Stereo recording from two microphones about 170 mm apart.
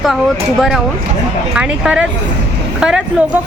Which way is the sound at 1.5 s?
5° right (ahead or behind).